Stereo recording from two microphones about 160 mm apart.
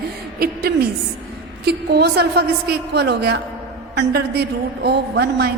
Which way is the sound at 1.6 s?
90° right.